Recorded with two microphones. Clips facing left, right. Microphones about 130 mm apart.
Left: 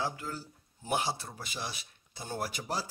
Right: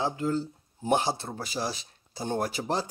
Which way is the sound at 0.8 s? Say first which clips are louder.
Right 7 dB; 35° right (ahead or behind).